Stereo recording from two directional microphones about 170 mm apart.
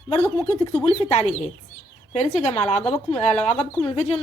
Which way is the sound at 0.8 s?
30° left (ahead or behind).